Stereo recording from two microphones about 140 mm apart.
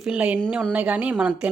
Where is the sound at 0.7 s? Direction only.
10° right (ahead or behind).